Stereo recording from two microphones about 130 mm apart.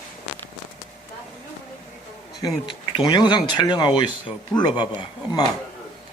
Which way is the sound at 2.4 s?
35° left (ahead or behind).